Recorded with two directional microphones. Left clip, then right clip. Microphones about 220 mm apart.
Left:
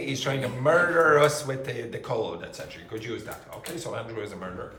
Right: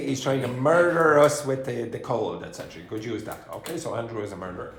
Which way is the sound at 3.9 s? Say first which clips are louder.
Right 3 dB; 20° right (ahead or behind).